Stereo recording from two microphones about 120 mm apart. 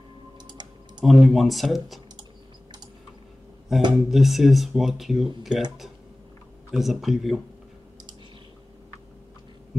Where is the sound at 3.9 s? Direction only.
Centre (ahead or behind).